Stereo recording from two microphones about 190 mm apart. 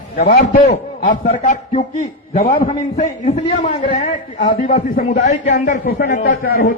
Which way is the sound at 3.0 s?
35° left (ahead or behind).